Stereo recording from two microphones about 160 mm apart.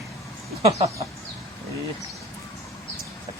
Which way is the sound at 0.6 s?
40° right (ahead or behind).